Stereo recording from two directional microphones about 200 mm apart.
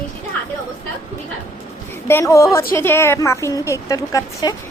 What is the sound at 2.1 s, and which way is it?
A woman's voice, 15° left (ahead or behind).